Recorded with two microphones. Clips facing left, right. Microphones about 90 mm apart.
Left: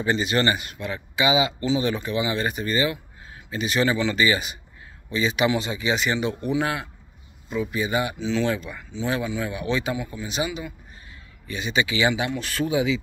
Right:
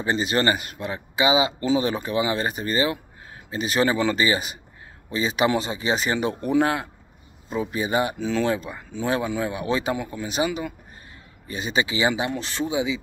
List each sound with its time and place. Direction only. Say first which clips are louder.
0.0 s speech: even; 35° right (ahead or behind); by 13.0 s 20° right (ahead or behind)